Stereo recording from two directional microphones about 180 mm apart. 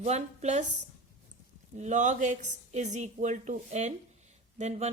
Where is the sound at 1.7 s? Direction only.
40° right (ahead or behind).